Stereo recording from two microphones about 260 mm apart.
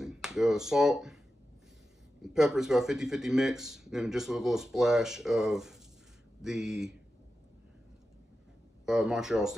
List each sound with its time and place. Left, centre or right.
0.0 s finger snapping: centre
2.2 s speech: centre
8.8 s speech: centre